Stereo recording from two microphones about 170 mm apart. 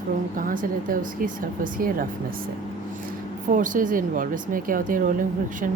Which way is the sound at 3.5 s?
50° right (ahead or behind).